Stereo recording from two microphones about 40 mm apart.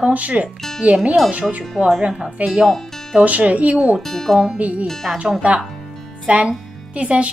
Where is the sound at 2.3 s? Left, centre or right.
Right.